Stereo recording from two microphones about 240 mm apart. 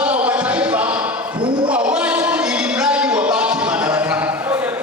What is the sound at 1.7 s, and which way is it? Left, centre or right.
Music, centre.